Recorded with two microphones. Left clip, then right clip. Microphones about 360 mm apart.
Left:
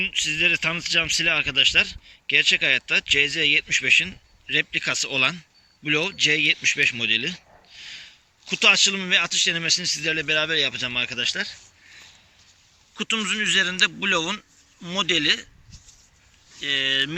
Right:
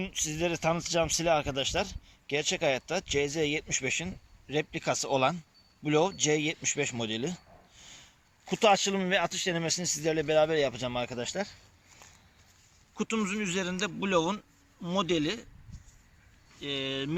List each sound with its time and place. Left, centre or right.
0.0 s speech: centre
13.0 s speech: centre
16.6 s speech: centre